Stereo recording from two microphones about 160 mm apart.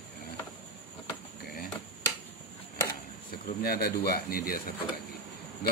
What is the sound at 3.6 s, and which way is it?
Speech, 75° left (ahead or behind).